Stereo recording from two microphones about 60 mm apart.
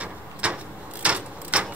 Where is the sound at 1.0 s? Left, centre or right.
Right.